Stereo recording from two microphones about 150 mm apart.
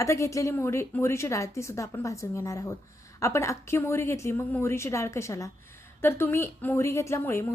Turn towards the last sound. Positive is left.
turn(degrees=15)  # may be behind; listen again after turning